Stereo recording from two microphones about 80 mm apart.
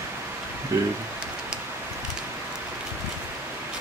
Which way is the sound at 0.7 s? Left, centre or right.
Right.